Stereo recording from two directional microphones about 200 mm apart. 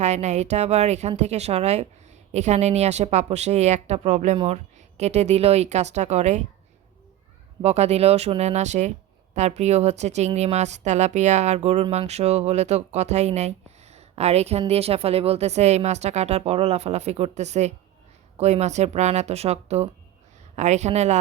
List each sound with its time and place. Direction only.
0.0 s speech: 35° right (ahead or behind)
7.6 s speech: 30° right (ahead or behind)